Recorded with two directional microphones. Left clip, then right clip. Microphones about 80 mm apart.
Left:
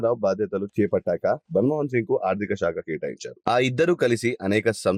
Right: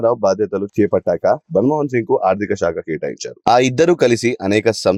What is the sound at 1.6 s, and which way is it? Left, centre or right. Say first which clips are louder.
Speech: right 6 dB; right.